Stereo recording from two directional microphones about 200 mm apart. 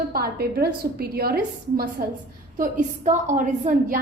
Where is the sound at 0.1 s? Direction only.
50° right (ahead or behind).